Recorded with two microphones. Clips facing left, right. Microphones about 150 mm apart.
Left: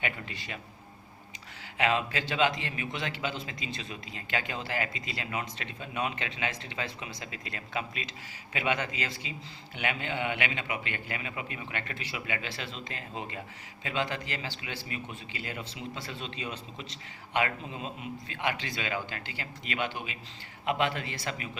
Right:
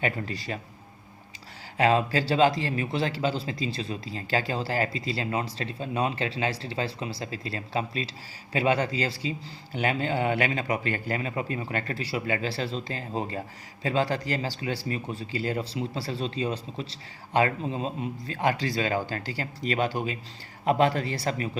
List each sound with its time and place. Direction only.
0.0 s a man's voice: 35° right (ahead or behind)
1.8 s a man's voice: 35° right (ahead or behind)